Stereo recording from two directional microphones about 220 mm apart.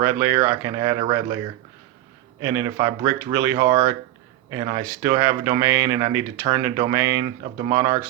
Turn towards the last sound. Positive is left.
turn(degrees=-15)  # may be behind; listen again after turning